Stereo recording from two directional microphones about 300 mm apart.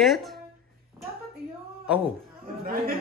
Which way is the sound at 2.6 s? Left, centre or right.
Right.